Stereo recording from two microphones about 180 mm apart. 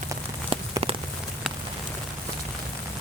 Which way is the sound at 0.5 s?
30° right (ahead or behind).